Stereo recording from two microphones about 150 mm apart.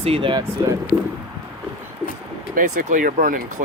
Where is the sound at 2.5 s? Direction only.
65° right (ahead or behind).